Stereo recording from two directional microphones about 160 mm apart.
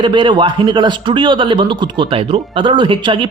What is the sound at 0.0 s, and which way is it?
A man's voice, 30° right (ahead or behind).